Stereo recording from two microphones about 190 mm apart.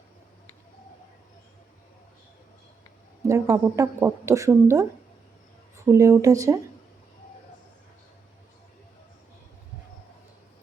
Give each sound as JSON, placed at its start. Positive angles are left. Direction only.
{"t": 3.2, "sound": "a woman's voice", "side_deg": -15}